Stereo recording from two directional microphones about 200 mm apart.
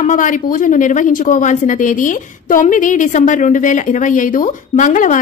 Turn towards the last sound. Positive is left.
turn(degrees=40)  # may be behind; listen again after turning